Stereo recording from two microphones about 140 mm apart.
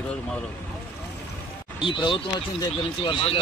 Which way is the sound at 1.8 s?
35° left (ahead or behind).